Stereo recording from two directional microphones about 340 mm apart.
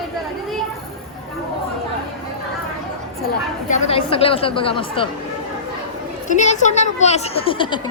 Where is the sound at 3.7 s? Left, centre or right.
Centre.